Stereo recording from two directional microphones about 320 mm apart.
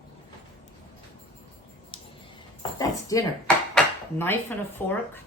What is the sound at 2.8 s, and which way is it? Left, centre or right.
Dishes, centre.